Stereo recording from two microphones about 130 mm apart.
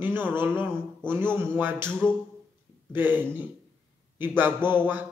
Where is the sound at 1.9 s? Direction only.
5° left (ahead or behind).